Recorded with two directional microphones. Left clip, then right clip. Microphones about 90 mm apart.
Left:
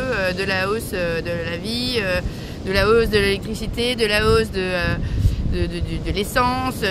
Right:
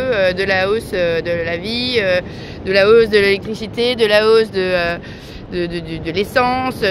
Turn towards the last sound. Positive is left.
turn(degrees=40)  # may be behind; listen again after turning